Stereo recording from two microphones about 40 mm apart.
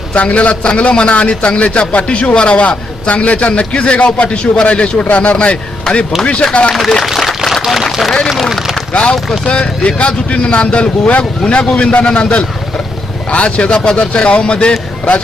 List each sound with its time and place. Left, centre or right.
0.1 s a man's voice: left
5.9 s speech: centre
6.5 s speech: left
7.2 s a sound: centre
8.3 s speech: centre
8.9 s speech: left